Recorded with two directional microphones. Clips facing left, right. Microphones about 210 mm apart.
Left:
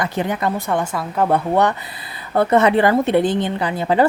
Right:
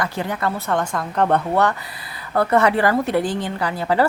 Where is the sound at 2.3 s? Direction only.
20° left (ahead or behind).